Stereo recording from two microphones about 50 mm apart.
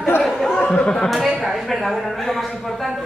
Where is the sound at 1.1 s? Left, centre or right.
Centre.